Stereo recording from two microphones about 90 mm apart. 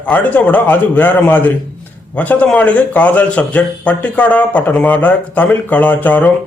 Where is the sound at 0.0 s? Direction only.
20° left (ahead or behind).